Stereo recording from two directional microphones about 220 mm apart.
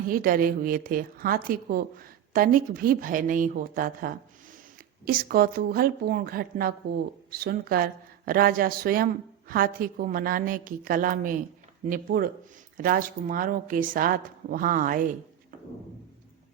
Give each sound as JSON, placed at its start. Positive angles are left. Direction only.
{"t": 0.1, "sound": "a woman's voice", "side_deg": -40}